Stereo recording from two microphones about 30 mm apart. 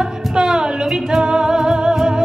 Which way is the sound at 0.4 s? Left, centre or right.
Right.